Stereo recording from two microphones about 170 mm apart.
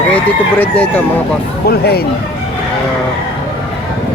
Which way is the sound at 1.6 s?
70° left (ahead or behind).